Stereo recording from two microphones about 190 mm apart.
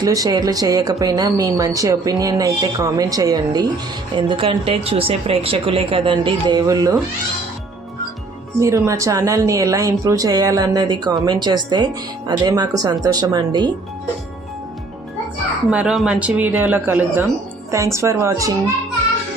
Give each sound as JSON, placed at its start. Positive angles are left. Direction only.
{"t": 0.0, "sound": "speech", "side_deg": -20}
{"t": 8.5, "sound": "speech", "side_deg": -15}
{"t": 15.7, "sound": "speech", "side_deg": -5}